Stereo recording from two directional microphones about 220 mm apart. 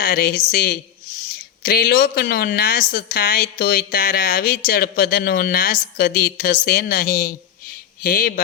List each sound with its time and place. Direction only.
0.0 s a woman's voice: 45° left (ahead or behind)